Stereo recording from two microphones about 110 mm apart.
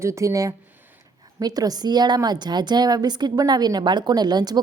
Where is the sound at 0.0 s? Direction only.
25° right (ahead or behind).